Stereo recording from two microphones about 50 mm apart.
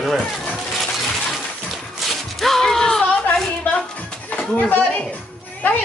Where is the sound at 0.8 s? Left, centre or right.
Centre.